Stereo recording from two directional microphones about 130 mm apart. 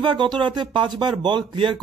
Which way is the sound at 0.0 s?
40° right (ahead or behind).